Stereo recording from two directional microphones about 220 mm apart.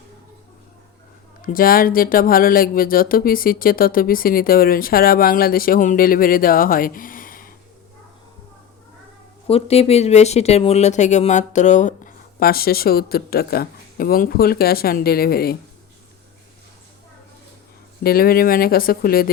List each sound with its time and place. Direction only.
1.4 s speech: 40° left (ahead or behind)
9.5 s speech: 25° left (ahead or behind); by 15.5 s 45° left (ahead or behind)
18.0 s speech: 45° left (ahead or behind)